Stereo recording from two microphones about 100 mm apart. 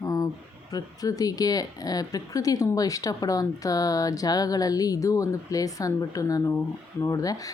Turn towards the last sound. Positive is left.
turn(degrees=35)  # may be behind; listen again after turning